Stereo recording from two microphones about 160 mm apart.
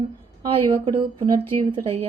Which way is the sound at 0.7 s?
35° right (ahead or behind).